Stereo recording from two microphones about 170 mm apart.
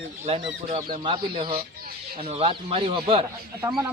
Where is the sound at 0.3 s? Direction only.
35° right (ahead or behind).